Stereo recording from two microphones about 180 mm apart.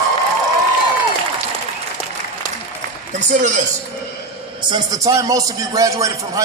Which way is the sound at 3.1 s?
45° right (ahead or behind).